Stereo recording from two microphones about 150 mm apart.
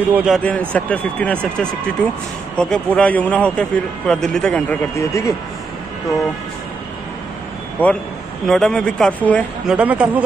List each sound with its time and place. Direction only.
0.1 s speech: 5° right (ahead or behind)
0.4 s speech: 10° left (ahead or behind)
4.9 s speech: 20° left (ahead or behind)
7.8 s speech: 15° left (ahead or behind)
9.7 s speech: 10° right (ahead or behind)